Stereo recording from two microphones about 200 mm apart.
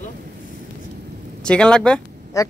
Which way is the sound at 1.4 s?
5° left (ahead or behind).